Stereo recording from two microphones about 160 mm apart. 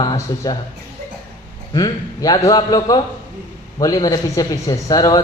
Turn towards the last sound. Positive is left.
turn(degrees=25)  # may be behind; listen again after turning